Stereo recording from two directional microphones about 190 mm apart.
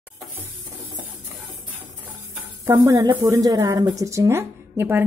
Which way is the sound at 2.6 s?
15° right (ahead or behind).